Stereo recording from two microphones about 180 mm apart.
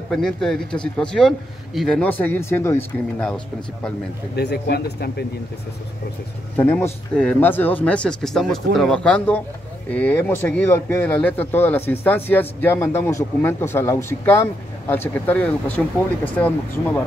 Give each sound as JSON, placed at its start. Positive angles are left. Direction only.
{"t": 0.1, "sound": "speech", "side_deg": 5}
{"t": 4.4, "sound": "speech", "side_deg": 70}
{"t": 6.5, "sound": "speech", "side_deg": 10}